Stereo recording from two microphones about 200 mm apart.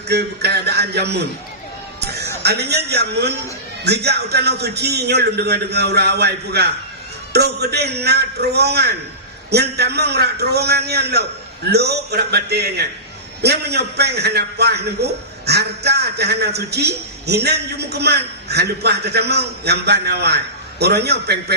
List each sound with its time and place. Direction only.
0.1 s a man's voice: 55° right (ahead or behind)